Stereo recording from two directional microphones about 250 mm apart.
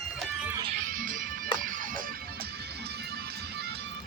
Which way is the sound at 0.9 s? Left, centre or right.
Right.